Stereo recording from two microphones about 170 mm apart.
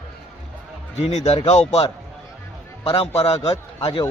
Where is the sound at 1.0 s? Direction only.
40° left (ahead or behind).